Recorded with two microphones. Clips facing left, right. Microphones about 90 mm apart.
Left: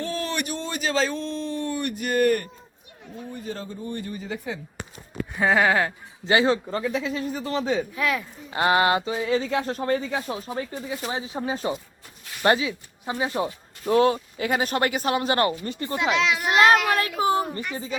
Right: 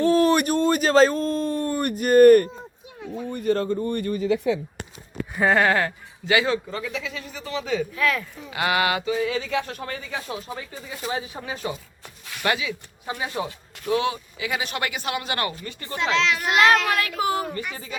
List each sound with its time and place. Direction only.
0.1 s a sound: 45° right (ahead or behind)
3.0 s speech: 70° right (ahead or behind); by 4.6 s 90° right
5.3 s a sound: centre (ahead or behind)
6.2 s speech: 30° left (ahead or behind)
8.4 s speech: 35° left (ahead or behind)
13.1 s speech: 20° left (ahead or behind)
13.8 s speech: 45° left (ahead or behind)
16.0 s a child's voice: 15° left (ahead or behind)
16.5 s speech: 30° left (ahead or behind)
16.9 s a sound: 30° left (ahead or behind)